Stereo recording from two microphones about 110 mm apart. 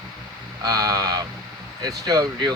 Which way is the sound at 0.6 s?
35° right (ahead or behind).